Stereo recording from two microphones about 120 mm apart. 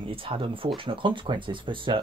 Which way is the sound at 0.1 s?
50° right (ahead or behind).